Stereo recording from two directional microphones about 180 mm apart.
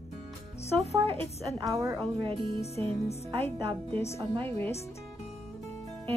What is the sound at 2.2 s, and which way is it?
Speech, 30° right (ahead or behind).